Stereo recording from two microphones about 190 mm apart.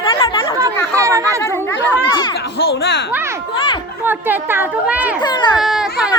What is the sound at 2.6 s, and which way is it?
Speech, 65° left (ahead or behind).